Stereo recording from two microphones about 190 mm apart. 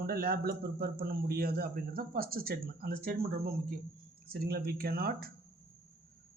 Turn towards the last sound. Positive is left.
turn(degrees=-55)  # may be behind; listen again after turning